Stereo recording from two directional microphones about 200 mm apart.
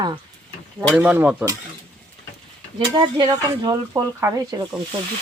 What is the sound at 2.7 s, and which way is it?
Speech, 20° right (ahead or behind).